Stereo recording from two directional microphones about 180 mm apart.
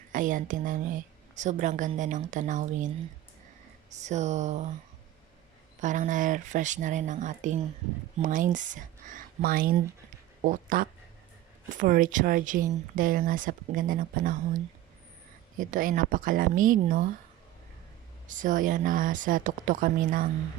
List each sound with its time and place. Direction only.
0.1 s a woman's voice: 45° right (ahead or behind)
3.9 s speech: 40° right (ahead or behind)
5.8 s speech: 45° right (ahead or behind)
18.3 s speech: 45° right (ahead or behind)